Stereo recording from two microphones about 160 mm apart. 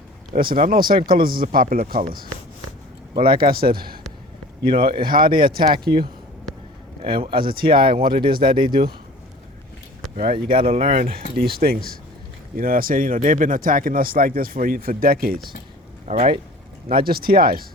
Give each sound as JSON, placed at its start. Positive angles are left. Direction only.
{"t": 0.3, "sound": "speech", "side_deg": -60}
{"t": 5.7, "sound": "speech", "side_deg": -30}
{"t": 7.3, "sound": "speech", "side_deg": -70}
{"t": 10.3, "sound": "speech", "side_deg": -35}
{"t": 10.8, "sound": "speech", "side_deg": -60}
{"t": 11.3, "sound": "speech", "side_deg": -70}
{"t": 16.0, "sound": "speech", "side_deg": -45}
{"t": 16.9, "sound": "speech", "side_deg": -70}